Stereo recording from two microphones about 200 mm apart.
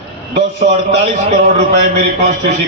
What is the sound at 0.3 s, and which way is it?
A man's voice, 35° right (ahead or behind).